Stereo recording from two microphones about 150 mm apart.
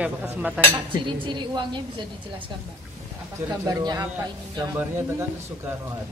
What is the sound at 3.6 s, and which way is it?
Speech, 25° right (ahead or behind).